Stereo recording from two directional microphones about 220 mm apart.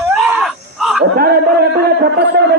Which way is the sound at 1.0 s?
45° right (ahead or behind).